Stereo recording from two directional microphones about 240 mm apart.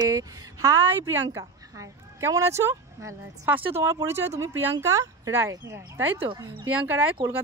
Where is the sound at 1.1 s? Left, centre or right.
Centre.